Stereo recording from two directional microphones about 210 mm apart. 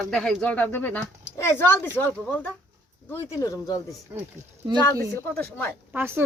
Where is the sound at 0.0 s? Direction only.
Centre (ahead or behind).